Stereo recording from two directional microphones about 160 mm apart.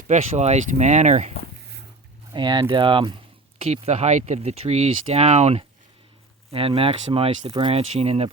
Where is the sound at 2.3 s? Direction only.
30° right (ahead or behind).